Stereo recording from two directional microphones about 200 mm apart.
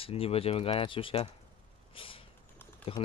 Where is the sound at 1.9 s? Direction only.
25° left (ahead or behind).